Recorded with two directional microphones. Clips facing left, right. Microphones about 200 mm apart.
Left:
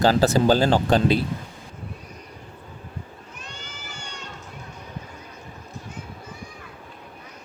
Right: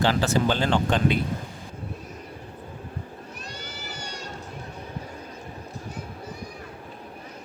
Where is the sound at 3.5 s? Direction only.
40° right (ahead or behind).